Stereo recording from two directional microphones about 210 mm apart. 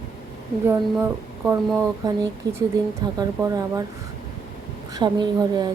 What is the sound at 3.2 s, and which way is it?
Speech, 15° right (ahead or behind).